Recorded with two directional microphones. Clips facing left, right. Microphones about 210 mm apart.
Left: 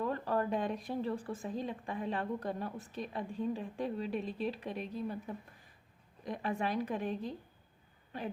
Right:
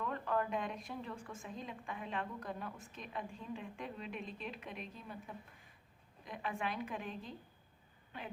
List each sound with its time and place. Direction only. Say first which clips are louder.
0.0 s speech: left 4 dB; 35° left (ahead or behind)